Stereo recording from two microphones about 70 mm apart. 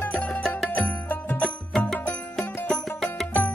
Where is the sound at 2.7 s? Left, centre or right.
Centre.